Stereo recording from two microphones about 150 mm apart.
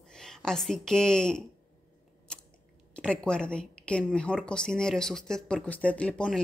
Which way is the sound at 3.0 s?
5° left (ahead or behind).